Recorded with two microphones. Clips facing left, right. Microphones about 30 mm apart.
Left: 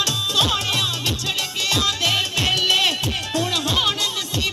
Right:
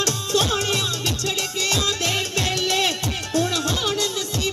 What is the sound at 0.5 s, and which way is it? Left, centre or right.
Music, left.